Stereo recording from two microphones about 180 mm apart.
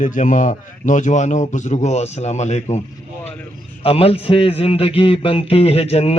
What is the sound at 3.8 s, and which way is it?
A man's voice, 30° left (ahead or behind).